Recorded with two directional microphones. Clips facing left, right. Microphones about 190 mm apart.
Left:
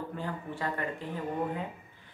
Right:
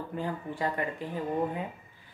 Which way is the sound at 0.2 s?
15° right (ahead or behind).